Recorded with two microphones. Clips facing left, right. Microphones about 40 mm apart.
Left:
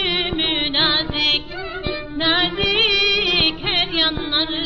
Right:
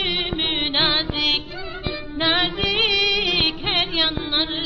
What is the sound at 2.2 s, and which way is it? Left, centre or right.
Music, centre.